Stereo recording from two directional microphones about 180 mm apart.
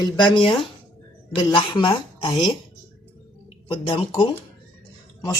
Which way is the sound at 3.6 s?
30° left (ahead or behind).